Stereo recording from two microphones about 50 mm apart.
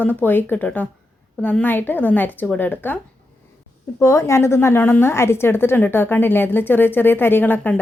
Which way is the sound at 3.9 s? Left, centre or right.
Left.